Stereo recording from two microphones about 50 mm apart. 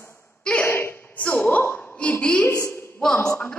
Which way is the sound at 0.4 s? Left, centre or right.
Left.